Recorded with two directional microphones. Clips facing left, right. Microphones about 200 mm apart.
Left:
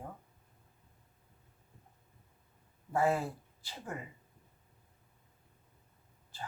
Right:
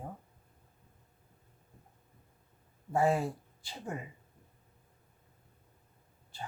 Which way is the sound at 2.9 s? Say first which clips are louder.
Right 2 dB; 15° right (ahead or behind).